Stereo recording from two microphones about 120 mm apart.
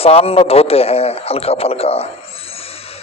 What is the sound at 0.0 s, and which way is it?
A man's voice, 55° left (ahead or behind).